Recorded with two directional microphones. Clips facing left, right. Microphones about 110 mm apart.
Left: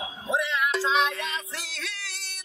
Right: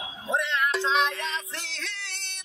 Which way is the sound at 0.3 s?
5° left (ahead or behind).